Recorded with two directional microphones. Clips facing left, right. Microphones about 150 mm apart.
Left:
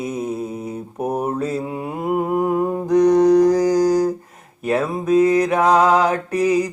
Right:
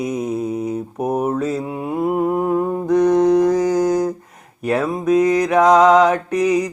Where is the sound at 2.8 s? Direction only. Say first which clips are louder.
Left 1 dB; 35° left (ahead or behind).